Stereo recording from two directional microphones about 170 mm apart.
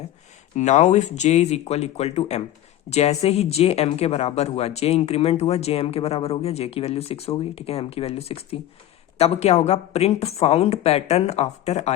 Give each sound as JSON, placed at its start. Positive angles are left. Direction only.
{"t": 0.5, "sound": "speech", "side_deg": 45}